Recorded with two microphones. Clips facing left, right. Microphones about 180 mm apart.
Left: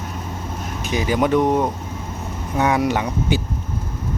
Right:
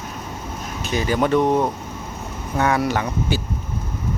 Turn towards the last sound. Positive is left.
turn(degrees=15)  # may be behind; listen again after turning